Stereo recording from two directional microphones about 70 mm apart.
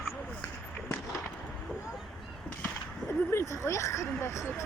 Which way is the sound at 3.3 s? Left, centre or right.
Left.